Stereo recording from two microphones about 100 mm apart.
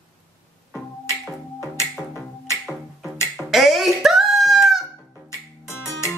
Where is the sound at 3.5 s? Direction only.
Centre (ahead or behind).